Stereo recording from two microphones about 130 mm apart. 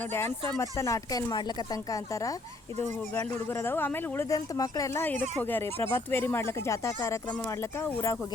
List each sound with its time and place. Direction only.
0.1 s speech: 20° left (ahead or behind)
5.0 s speech: 15° left (ahead or behind)